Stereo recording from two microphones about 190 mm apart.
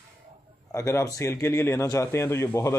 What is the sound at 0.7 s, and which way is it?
A man's voice, 15° left (ahead or behind).